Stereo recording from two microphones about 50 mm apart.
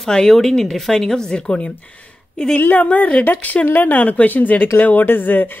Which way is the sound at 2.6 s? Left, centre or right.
Left.